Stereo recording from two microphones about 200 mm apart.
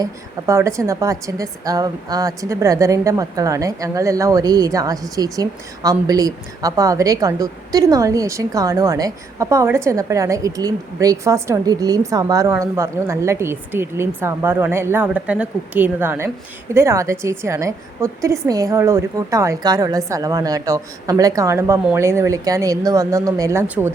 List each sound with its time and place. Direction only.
0.0 s a woman's voice: 15° right (ahead or behind)